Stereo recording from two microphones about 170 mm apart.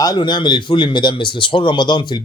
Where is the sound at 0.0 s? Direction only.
25° left (ahead or behind).